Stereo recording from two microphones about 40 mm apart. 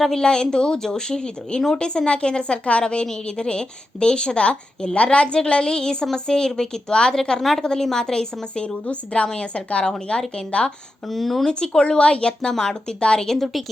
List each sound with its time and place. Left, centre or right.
0.2 s a woman's voice: centre
11.1 s speech: centre
11.4 s a woman's voice: centre
13.2 s a woman's voice: centre